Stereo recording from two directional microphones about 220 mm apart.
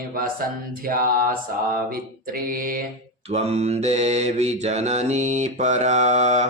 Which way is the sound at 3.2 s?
30° right (ahead or behind).